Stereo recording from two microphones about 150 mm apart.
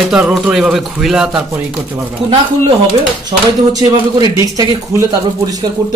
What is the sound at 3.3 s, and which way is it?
Speech, 30° right (ahead or behind).